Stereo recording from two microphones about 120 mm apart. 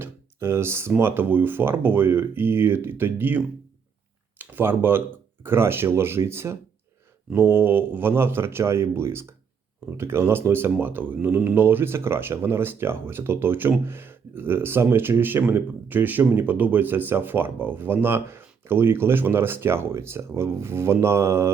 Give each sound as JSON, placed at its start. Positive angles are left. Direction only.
{"t": 0.0, "sound": "speech", "side_deg": -20}